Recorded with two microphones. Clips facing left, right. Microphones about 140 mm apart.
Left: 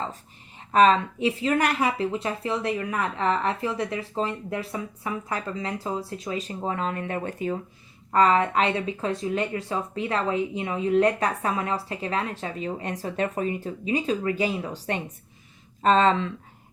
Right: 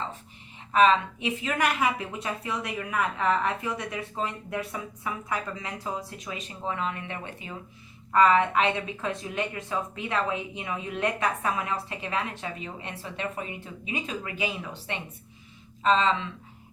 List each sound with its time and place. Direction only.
0.7 s speech: 40° left (ahead or behind)